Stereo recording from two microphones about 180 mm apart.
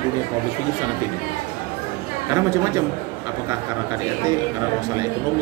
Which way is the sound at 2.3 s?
15° right (ahead or behind).